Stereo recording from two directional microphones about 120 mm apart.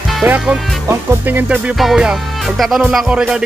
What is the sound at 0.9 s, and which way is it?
Speech, 20° right (ahead or behind).